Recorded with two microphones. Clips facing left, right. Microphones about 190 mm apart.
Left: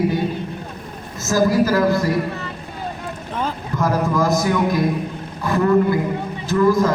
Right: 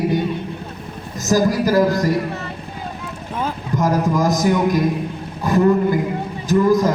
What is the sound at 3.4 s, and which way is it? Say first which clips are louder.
A man's voice: right 2 dB; 15° right (ahead or behind).